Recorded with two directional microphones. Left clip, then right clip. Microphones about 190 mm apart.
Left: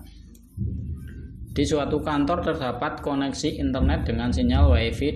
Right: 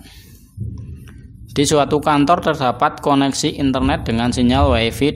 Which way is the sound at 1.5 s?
35° right (ahead or behind).